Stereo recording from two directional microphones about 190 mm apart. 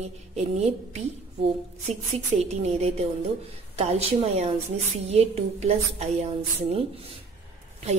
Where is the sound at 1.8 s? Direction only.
35° right (ahead or behind).